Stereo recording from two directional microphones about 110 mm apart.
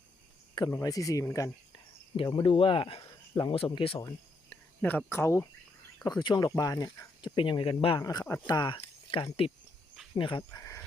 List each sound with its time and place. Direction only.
0.7 s speech: 30° left (ahead or behind)
1.7 s speech: 50° left (ahead or behind)
3.0 s speech: 40° left (ahead or behind); by 3.9 s 55° left (ahead or behind)
4.4 s speech: 15° left (ahead or behind)
6.0 s speech: 40° left (ahead or behind)
7.3 s speech: 50° left (ahead or behind)
7.9 s speech: 35° left (ahead or behind)
10.5 s a sound: 25° left (ahead or behind)